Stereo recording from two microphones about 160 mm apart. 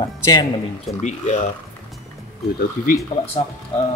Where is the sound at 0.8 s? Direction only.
45° left (ahead or behind).